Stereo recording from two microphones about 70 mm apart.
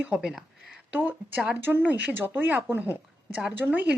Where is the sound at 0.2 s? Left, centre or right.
Centre.